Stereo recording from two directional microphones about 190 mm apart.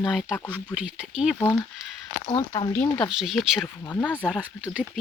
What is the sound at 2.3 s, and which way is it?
Speech, 25° left (ahead or behind).